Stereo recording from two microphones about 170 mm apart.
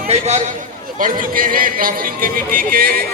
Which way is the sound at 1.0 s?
55° right (ahead or behind).